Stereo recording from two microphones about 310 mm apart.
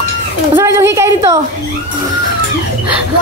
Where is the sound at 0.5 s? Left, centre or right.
Centre.